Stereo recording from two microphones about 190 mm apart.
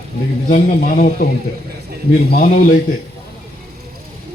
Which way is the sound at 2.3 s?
50° left (ahead or behind).